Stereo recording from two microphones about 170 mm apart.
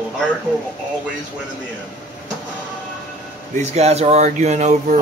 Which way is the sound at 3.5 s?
40° right (ahead or behind).